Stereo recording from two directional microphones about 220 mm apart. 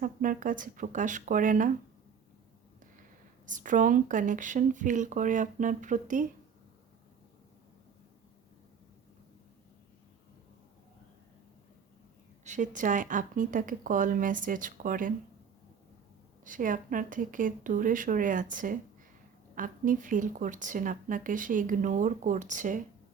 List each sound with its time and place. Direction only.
0.0 s a woman's voice: 40° right (ahead or behind)
3.4 s a woman's voice: 35° right (ahead or behind)
12.5 s a woman's voice: 35° right (ahead or behind)
16.4 s a woman's voice: 35° right (ahead or behind)